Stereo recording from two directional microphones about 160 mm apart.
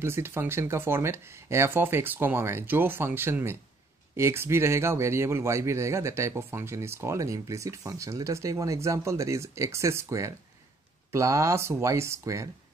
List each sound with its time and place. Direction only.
0.0 s speech: 15° right (ahead or behind)